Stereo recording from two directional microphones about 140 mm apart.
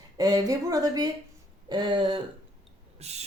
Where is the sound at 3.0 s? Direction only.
50° right (ahead or behind).